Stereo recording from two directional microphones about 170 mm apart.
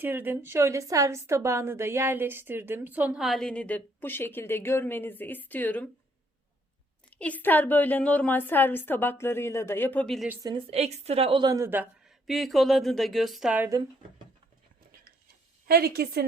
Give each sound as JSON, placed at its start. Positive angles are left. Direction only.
{"t": 0.0, "sound": "a woman's voice", "side_deg": -10}
{"t": 7.1, "sound": "a woman's voice", "side_deg": 10}
{"t": 10.4, "sound": "a woman's voice", "side_deg": -30}
{"t": 15.6, "sound": "a woman's voice", "side_deg": -65}